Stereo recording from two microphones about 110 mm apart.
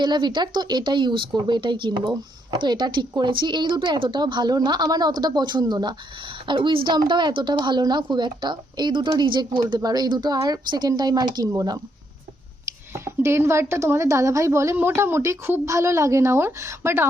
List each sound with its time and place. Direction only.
0.0 s a woman's voice: 45° right (ahead or behind)
12.9 s speech: 25° right (ahead or behind)